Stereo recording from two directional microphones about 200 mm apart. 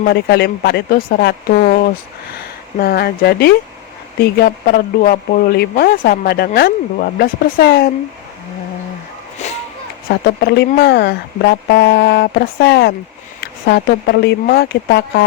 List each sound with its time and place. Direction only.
0.0 s speech: 55° left (ahead or behind)
2.7 s speech: 50° left (ahead or behind)
10.2 s speech: 55° left (ahead or behind)